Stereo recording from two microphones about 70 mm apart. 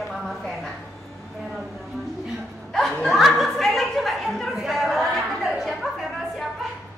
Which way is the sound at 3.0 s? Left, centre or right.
Centre.